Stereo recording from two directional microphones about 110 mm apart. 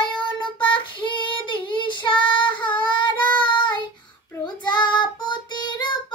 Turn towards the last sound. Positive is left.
turn(degrees=40)  # may be behind; listen again after turning